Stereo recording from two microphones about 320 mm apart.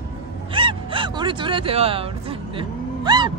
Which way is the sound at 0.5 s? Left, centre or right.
Centre.